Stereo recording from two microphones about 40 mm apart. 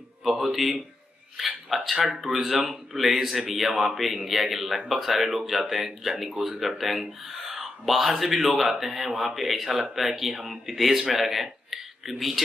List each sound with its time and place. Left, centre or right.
0.2 s speech: centre
2.0 s speech: right
2.2 s speech: centre